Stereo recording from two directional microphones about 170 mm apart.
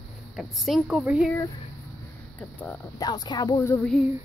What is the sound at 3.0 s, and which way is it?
Speech, 25° left (ahead or behind).